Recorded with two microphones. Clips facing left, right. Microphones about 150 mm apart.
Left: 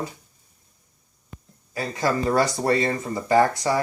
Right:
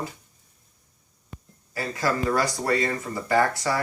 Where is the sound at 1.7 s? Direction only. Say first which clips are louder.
Left 2 dB; 20° left (ahead or behind).